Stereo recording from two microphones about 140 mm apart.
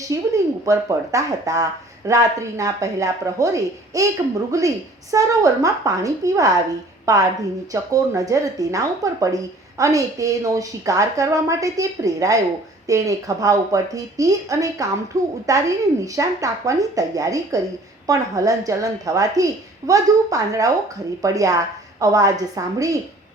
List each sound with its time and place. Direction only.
0.1 s a woman's voice: 25° right (ahead or behind)